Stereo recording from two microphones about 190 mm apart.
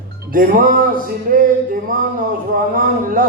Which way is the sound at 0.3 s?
45° right (ahead or behind).